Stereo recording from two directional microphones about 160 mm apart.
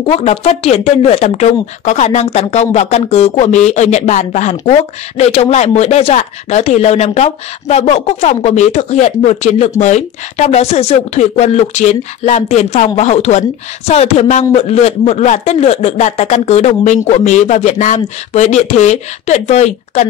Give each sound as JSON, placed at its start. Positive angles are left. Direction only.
{"t": 0.0, "sound": "speech", "side_deg": 40}